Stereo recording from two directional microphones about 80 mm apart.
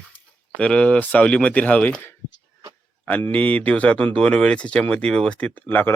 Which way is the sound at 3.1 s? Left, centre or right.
Centre.